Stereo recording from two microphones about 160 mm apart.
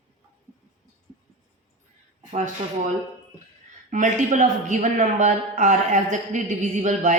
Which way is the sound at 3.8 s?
50° right (ahead or behind).